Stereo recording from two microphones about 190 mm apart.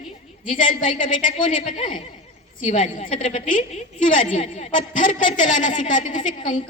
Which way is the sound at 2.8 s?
40° left (ahead or behind).